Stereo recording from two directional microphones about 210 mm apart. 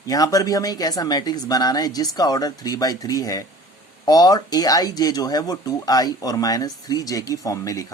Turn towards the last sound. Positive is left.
turn(degrees=15)  # may be behind; listen again after turning